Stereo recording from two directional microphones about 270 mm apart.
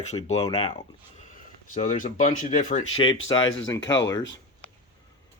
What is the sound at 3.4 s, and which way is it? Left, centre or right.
Speech, left.